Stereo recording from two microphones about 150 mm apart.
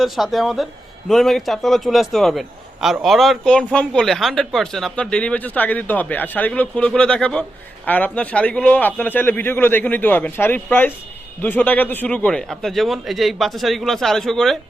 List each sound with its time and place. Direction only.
0.0 s a man's voice: centre (ahead or behind)